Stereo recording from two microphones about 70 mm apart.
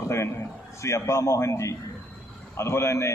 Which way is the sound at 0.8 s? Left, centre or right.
Left.